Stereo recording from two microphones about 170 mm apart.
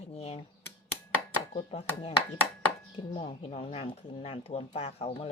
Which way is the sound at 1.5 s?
35° left (ahead or behind).